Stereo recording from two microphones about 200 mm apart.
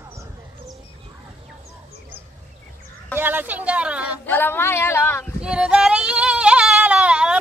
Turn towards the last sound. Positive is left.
turn(degrees=-5)  # may be behind; listen again after turning